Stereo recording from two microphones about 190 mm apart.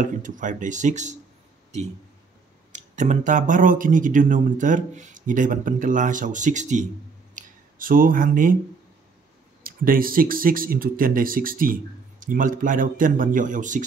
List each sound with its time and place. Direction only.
0.0 s speech: 40° right (ahead or behind)
2.7 s speech: 40° right (ahead or behind)
9.6 s speech: 50° right (ahead or behind)